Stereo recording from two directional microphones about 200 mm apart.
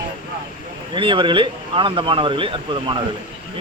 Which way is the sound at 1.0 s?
25° right (ahead or behind).